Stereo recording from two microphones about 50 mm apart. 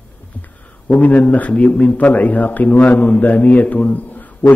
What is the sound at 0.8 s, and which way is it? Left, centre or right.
A man's voice, left.